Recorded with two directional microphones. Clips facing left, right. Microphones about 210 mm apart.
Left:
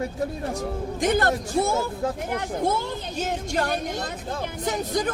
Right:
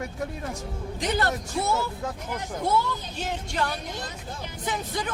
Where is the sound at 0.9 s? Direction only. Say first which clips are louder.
Left 4 dB; 50° left (ahead or behind).